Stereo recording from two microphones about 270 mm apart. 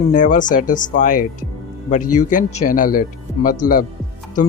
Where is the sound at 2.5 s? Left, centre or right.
Left.